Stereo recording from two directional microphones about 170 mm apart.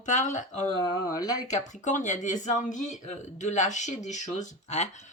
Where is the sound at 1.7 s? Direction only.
45° left (ahead or behind).